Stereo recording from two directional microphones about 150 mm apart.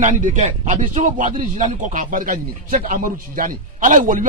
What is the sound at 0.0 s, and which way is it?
Speech, 55° right (ahead or behind).